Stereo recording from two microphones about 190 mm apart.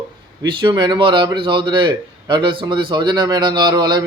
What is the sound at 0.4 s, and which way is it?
Speech, 25° right (ahead or behind).